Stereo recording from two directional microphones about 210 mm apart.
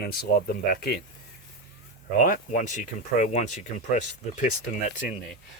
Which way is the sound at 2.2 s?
40° left (ahead or behind).